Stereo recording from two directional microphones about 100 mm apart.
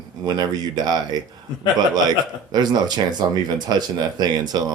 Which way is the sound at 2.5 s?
45° right (ahead or behind).